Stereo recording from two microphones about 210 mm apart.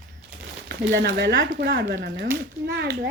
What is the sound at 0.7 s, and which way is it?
Speech, 55° right (ahead or behind).